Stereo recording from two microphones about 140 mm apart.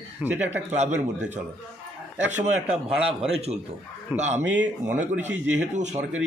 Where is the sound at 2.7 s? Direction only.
5° right (ahead or behind).